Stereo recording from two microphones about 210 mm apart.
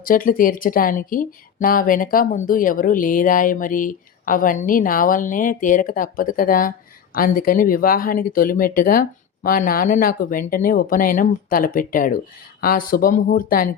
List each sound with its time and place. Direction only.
0.0 s speech: 40° left (ahead or behind)